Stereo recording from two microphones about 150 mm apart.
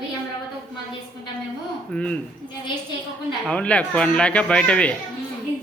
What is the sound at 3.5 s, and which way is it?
Speech, 10° left (ahead or behind).